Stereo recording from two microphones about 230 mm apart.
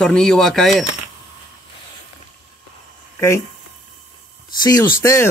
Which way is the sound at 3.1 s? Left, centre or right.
Centre.